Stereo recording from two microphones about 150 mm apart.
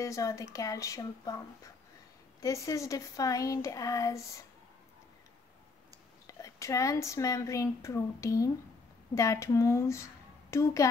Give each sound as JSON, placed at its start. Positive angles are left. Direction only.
{"t": 0.0, "sound": "speech", "side_deg": 20}
{"t": 6.2, "sound": "speech", "side_deg": 20}